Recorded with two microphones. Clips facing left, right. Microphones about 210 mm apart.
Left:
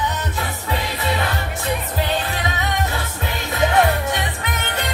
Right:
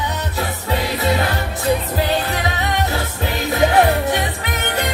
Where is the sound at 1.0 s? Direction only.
40° right (ahead or behind).